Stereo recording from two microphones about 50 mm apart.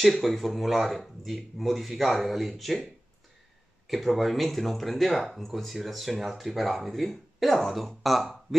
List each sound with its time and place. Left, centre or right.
0.0 s speech: centre